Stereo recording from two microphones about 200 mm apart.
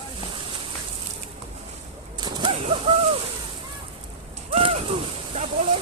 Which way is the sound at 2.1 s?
20° right (ahead or behind).